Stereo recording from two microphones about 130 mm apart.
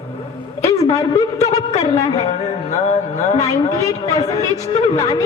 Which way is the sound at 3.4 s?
25° left (ahead or behind).